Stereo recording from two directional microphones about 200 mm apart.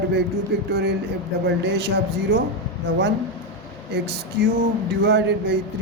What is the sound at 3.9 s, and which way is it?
A man's voice, 55° right (ahead or behind).